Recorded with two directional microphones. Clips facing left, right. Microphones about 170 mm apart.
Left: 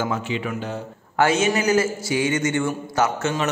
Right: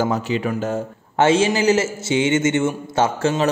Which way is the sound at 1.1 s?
25° right (ahead or behind).